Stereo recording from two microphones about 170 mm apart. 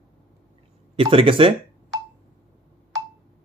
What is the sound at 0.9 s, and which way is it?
Speech, 30° right (ahead or behind).